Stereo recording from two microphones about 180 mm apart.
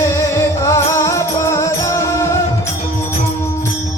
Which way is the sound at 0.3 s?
15° left (ahead or behind).